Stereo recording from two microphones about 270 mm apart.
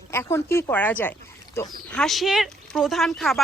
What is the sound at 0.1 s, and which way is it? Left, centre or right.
Speech, centre.